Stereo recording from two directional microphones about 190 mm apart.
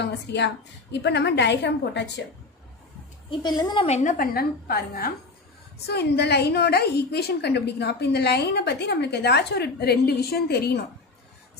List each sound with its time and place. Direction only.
0.0 s a woman's voice: 65° left (ahead or behind)
3.3 s a woman's voice: 20° left (ahead or behind); by 10.8 s 60° left (ahead or behind)